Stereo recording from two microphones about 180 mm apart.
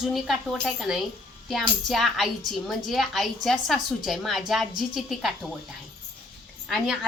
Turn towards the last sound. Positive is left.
turn(degrees=0)  # may be behind; listen again after turning